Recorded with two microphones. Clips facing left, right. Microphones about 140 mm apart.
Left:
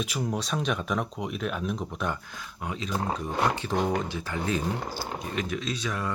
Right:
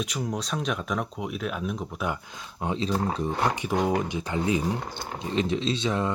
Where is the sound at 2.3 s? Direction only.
25° right (ahead or behind).